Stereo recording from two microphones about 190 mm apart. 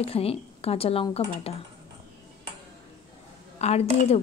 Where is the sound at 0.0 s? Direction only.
30° left (ahead or behind).